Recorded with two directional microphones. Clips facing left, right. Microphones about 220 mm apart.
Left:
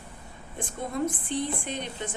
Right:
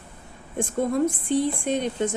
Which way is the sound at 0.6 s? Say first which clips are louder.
Right 7 dB; 45° right (ahead or behind).